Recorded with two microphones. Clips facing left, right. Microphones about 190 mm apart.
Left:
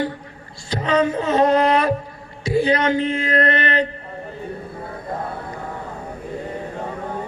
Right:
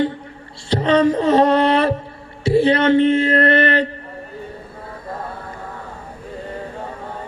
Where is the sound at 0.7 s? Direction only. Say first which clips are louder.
Right 4 dB; 30° right (ahead or behind).